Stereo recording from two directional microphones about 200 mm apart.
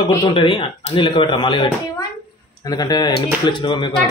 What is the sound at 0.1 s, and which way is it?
Speech, 20° left (ahead or behind).